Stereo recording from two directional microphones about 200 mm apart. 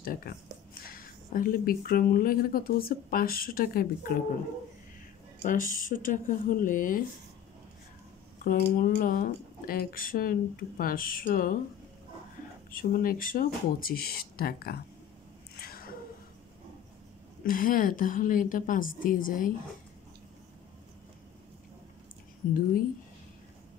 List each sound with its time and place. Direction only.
0.0 s a woman's voice: 45° left (ahead or behind)
5.4 s a woman's voice: 40° left (ahead or behind)
8.7 s a woman's voice: 45° left (ahead or behind)
12.7 s a woman's voice: 45° left (ahead or behind)
15.5 s a sound: 50° left (ahead or behind)
17.5 s a woman's voice: 45° left (ahead or behind)